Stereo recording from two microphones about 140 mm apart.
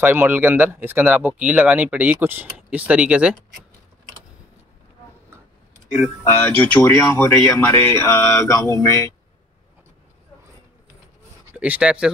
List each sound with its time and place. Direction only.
0.0 s speech: 15° right (ahead or behind)
6.2 s speech: 15° left (ahead or behind)
11.5 s speech: 10° right (ahead or behind)